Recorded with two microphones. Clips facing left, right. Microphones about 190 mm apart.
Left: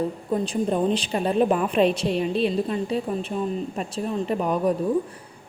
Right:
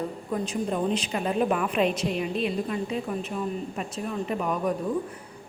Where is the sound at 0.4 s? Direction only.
30° left (ahead or behind).